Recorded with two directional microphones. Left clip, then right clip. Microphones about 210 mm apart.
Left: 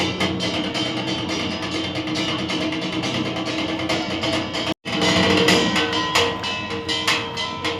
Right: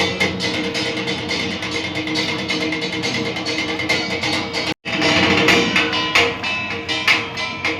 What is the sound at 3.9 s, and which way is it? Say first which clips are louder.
Music: right 4 dB; centre (ahead or behind).